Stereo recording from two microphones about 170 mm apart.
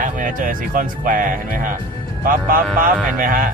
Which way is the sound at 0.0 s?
50° right (ahead or behind).